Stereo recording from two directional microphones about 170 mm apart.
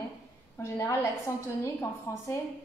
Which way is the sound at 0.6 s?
15° left (ahead or behind).